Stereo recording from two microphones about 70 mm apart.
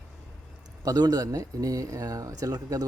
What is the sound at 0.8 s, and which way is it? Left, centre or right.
A man's voice, right.